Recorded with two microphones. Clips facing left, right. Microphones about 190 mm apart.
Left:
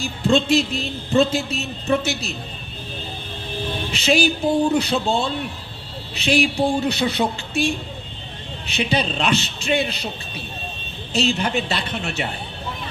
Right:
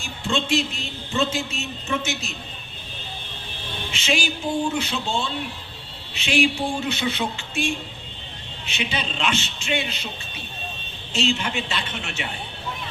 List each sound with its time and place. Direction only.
0.0 s speech: 35° left (ahead or behind)
3.9 s speech: 35° left (ahead or behind)
11.1 s speech: 35° left (ahead or behind)